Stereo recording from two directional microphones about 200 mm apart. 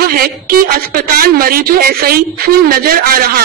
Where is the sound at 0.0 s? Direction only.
50° right (ahead or behind).